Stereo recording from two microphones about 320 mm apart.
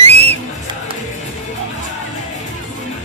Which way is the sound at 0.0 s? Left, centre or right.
Centre.